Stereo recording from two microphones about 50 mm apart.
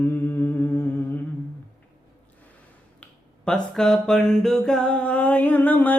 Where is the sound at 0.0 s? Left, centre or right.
Left.